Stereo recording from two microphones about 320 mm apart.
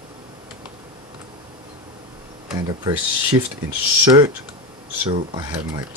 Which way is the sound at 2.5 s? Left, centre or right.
Centre.